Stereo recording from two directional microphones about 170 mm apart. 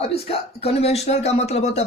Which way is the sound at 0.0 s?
35° left (ahead or behind).